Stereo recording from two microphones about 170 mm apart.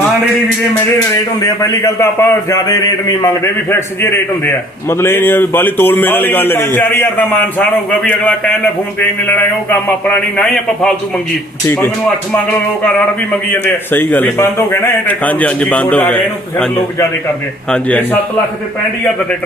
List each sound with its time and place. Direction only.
1.4 s a man's voice: 20° left (ahead or behind); by 10.9 s 5° left (ahead or behind)
12.3 s a man's voice: 10° left (ahead or behind)